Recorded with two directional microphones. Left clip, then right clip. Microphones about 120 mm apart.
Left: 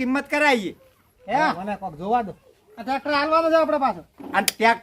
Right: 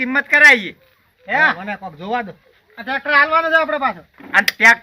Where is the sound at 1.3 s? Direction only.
10° left (ahead or behind).